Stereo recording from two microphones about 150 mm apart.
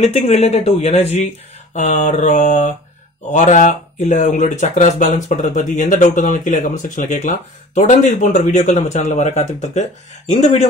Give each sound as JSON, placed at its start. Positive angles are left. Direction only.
{"t": 0.0, "sound": "speech", "side_deg": 45}